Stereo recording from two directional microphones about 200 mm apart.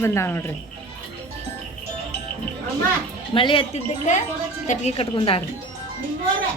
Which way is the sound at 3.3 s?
25° left (ahead or behind).